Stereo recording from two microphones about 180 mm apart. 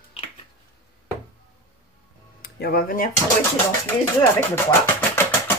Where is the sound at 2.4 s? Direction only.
60° left (ahead or behind).